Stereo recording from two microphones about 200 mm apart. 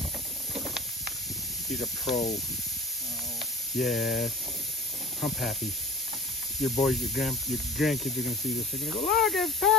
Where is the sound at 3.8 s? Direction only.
Centre (ahead or behind).